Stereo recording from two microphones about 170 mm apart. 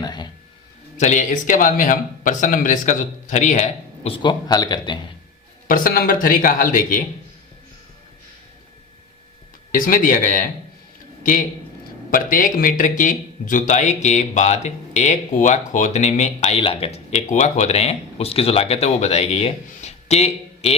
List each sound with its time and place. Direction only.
0.0 s a sound: 25° left (ahead or behind)
0.9 s speech: 45° left (ahead or behind); by 4.9 s 25° left (ahead or behind)
5.6 s speech: 55° left (ahead or behind)
9.7 s a man's voice: 55° left (ahead or behind); by 20.7 s 40° left (ahead or behind)